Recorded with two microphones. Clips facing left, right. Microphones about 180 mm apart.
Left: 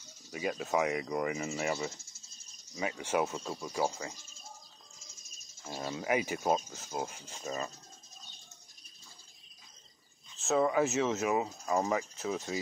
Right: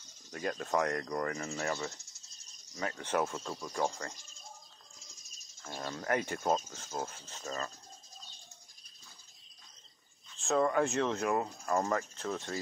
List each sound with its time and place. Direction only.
0.3 s speech: 5° left (ahead or behind)
1.5 s speech: 15° left (ahead or behind)
1.8 s speech: centre (ahead or behind)
5.6 s speech: 10° left (ahead or behind)
10.3 s speech: 5° left (ahead or behind)